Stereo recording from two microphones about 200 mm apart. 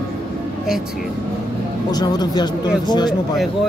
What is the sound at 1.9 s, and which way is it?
Speech, 20° left (ahead or behind).